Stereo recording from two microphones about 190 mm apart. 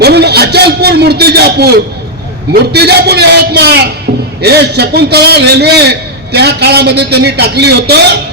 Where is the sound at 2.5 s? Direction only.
60° right (ahead or behind).